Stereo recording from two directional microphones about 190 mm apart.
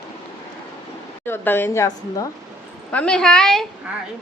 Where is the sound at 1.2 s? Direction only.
10° left (ahead or behind).